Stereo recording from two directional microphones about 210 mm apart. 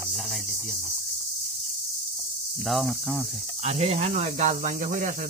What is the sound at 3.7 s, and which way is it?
Speech, 30° right (ahead or behind).